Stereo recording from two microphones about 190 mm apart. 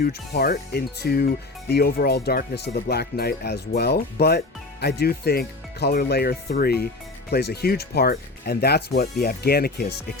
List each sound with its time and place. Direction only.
0.0 s speech: 55° left (ahead or behind)